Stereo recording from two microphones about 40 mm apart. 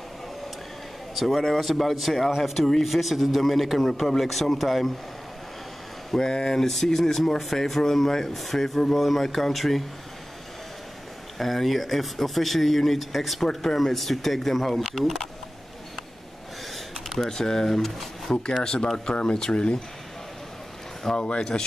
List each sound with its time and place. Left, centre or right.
1.1 s speech: centre
6.1 s speech: centre
11.3 s speech: centre
13.5 s speech: centre
13.7 s speech: centre
17.1 s speech: centre
21.0 s speech: centre